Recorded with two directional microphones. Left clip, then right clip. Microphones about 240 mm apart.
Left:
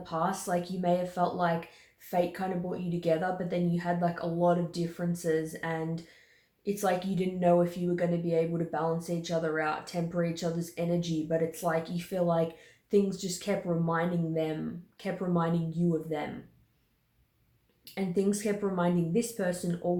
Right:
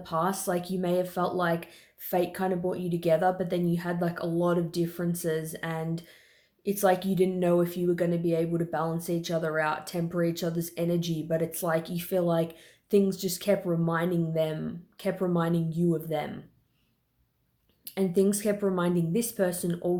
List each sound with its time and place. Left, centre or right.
0.0 s speech: right
17.9 s speech: right